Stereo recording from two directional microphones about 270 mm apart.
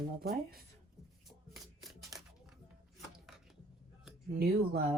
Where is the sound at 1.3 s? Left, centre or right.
Centre.